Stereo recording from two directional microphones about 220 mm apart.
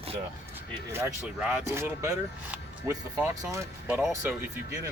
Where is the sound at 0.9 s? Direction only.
10° right (ahead or behind).